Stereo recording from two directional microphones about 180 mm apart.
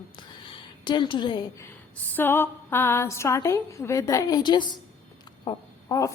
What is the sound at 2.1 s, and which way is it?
A woman's voice, 10° left (ahead or behind).